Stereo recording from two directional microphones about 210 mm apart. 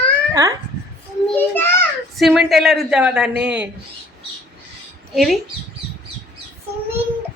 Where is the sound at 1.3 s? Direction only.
10° left (ahead or behind).